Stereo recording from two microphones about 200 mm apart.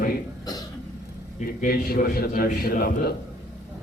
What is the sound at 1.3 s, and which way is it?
A man's voice, 45° left (ahead or behind).